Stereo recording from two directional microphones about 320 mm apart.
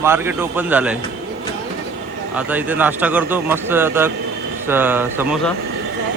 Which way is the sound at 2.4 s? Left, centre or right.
Centre.